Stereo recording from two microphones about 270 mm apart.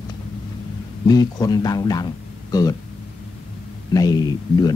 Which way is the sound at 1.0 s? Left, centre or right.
Centre.